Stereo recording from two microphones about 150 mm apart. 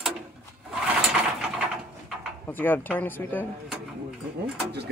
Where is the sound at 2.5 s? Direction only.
15° left (ahead or behind).